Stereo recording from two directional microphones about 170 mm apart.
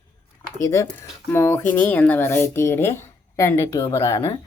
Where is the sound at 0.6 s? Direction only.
15° left (ahead or behind).